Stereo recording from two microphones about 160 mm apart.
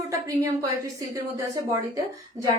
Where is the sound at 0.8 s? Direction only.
20° right (ahead or behind).